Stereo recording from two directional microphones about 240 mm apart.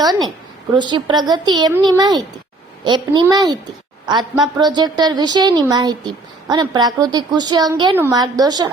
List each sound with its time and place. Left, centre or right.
0.0 s a woman's voice: centre